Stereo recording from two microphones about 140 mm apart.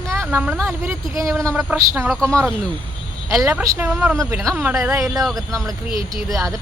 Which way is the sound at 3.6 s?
20° right (ahead or behind).